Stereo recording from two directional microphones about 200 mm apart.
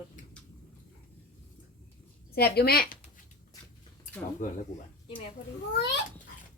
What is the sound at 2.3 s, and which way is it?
Speech, 50° left (ahead or behind).